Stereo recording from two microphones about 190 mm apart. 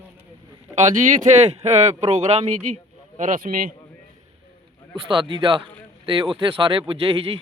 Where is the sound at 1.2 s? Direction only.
35° right (ahead or behind).